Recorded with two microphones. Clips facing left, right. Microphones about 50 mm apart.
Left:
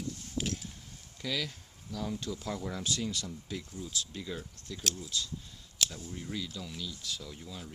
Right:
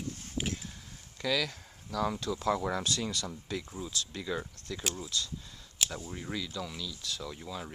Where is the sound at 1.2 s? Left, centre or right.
Right.